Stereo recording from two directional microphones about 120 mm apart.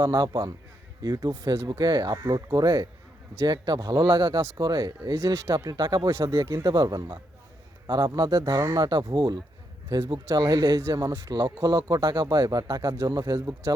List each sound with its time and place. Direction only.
0.0 s speech: 35° right (ahead or behind)